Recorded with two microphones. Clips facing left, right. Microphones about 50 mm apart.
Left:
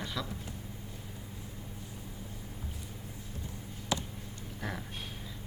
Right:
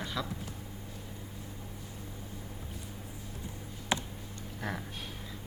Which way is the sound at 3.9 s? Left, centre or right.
Right.